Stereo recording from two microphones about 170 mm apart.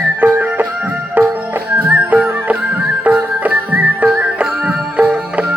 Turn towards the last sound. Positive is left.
turn(degrees=-10)  # may be behind; listen again after turning